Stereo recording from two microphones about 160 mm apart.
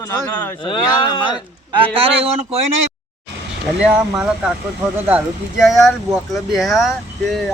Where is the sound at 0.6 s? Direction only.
30° left (ahead or behind).